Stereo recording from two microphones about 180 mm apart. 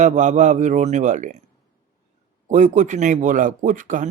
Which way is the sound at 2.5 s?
40° right (ahead or behind).